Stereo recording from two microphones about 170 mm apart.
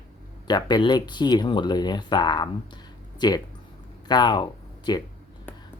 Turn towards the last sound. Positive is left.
turn(degrees=25)  # may be behind; listen again after turning